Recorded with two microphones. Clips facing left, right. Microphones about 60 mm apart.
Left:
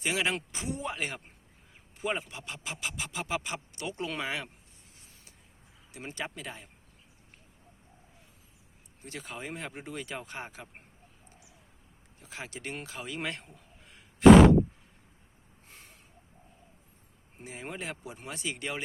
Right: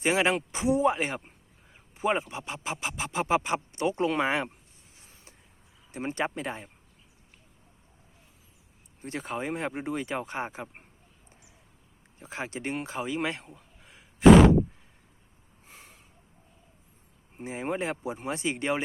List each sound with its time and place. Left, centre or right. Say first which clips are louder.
0.0 s speech: right 6 dB; right
5.9 s speech: right 8 dB; right
9.0 s speech: right 8 dB; right
12.2 s speech: right 6 dB; right
13.1 s a sound: right 5 dB; centre
15.6 s snort: right 3 dB; centre
17.4 s speech: right 8 dB; right